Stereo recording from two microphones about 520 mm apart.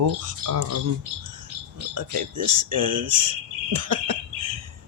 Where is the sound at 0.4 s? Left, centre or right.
Right.